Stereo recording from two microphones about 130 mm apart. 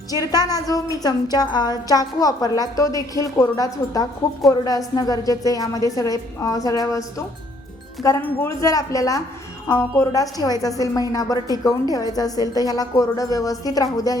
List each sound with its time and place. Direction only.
0.1 s a woman's voice: 30° left (ahead or behind)